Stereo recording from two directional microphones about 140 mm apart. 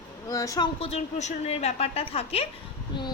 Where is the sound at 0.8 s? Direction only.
50° left (ahead or behind).